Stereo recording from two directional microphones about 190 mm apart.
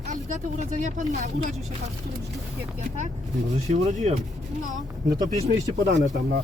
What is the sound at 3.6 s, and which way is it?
Speech, 35° right (ahead or behind).